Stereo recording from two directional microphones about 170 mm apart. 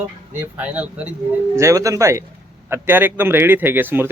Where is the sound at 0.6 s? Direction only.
10° right (ahead or behind).